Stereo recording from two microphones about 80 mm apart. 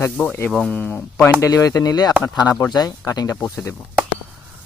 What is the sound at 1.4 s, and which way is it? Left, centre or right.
Speech, left.